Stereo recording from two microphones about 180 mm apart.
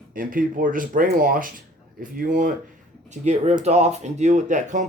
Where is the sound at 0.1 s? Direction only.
50° right (ahead or behind).